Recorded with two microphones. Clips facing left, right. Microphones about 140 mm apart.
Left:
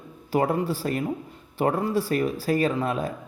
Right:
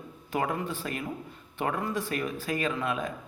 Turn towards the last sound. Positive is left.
turn(degrees=35)  # may be behind; listen again after turning